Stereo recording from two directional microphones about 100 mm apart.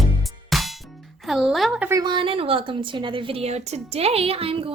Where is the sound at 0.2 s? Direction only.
Centre (ahead or behind).